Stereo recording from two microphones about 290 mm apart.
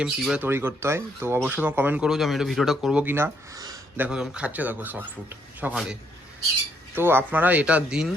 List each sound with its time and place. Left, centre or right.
0.0 s speech: centre